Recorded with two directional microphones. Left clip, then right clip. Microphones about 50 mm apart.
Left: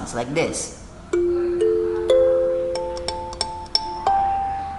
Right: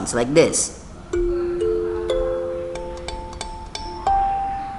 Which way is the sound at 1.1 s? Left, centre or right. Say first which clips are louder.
Left 2 dB; centre.